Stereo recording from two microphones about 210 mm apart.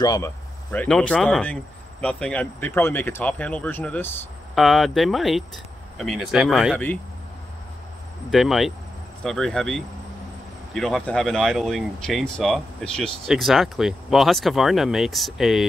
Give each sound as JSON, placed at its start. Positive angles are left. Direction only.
{"t": 0.0, "sound": "speech", "side_deg": 15}
{"t": 0.7, "sound": "speech", "side_deg": 5}
{"t": 8.3, "sound": "speech", "side_deg": 0}